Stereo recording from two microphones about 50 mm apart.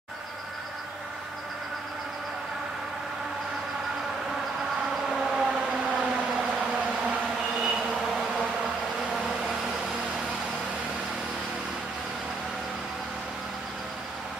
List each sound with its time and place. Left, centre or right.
5.0 s siren: centre
6.6 s a sound: right
7.6 s vehicle: centre